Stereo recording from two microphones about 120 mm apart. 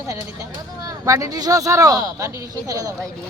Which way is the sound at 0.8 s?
30° right (ahead or behind).